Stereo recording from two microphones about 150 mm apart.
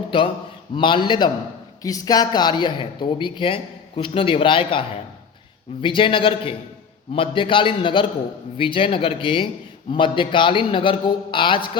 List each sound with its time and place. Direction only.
0.8 s speech: 35° left (ahead or behind)